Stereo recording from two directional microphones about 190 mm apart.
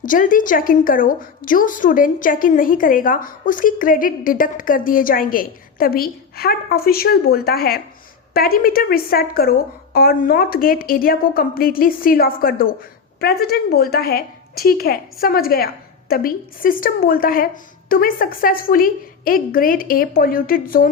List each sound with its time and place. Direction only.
0.0 s a woman's voice: 45° left (ahead or behind)